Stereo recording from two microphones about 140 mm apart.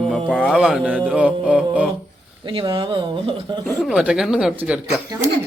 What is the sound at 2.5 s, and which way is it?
Speech, 35° right (ahead or behind).